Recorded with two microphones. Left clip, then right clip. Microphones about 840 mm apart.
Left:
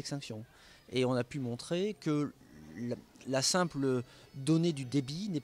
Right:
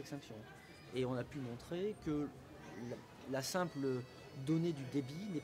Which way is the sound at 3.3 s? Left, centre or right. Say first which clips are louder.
Left 8 dB; left.